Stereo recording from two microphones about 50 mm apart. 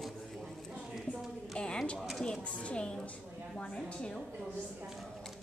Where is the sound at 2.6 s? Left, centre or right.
Left.